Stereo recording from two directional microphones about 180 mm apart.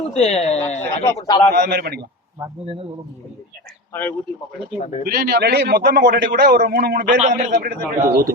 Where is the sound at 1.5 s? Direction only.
65° right (ahead or behind).